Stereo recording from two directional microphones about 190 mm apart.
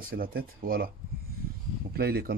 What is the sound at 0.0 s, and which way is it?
Speech, 50° right (ahead or behind).